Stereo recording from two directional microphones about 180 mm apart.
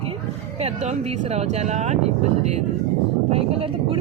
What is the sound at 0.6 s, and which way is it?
Speech, 35° right (ahead or behind).